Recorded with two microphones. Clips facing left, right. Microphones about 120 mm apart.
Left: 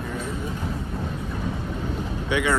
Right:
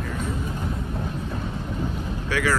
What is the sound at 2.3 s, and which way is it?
Vehicle, 20° left (ahead or behind).